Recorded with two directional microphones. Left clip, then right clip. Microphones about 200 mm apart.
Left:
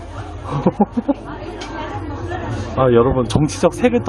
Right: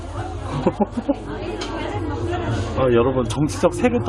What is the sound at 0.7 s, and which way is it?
Speech, 25° left (ahead or behind).